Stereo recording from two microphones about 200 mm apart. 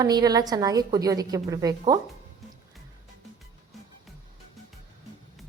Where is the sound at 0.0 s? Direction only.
20° right (ahead or behind).